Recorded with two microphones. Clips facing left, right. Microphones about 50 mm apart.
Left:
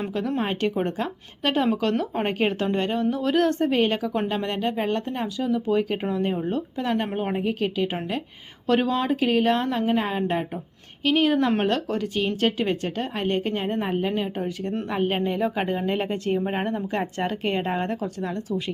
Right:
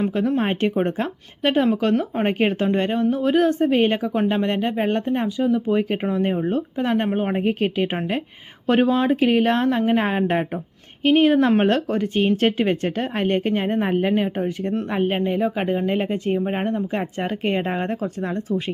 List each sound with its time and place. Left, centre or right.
0.4 s speech: right
1.7 s speech: centre
2.2 s speech: right
7.3 s a woman's voice: right
14.8 s speech: centre